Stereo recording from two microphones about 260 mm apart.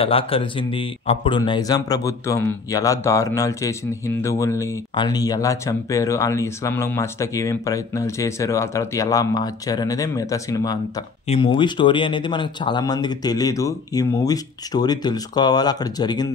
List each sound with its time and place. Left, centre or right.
0.0 s speech: left